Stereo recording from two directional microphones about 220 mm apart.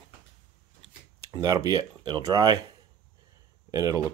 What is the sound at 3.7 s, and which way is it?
Speech, 15° right (ahead or behind).